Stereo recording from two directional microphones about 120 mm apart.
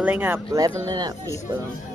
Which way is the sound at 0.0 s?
15° right (ahead or behind).